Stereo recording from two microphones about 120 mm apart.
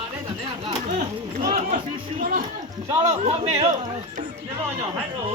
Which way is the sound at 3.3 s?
60° right (ahead or behind).